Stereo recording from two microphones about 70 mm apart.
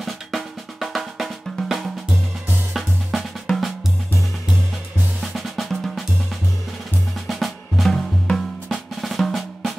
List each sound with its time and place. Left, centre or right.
0.0 s drum: centre
5.2 s drum: centre
7.2 s drum: centre